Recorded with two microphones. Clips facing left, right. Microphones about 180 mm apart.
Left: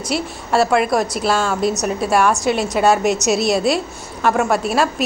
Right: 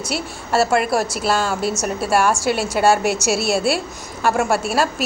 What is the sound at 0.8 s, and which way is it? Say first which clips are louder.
A woman's voice: left 2 dB; 5° right (ahead or behind).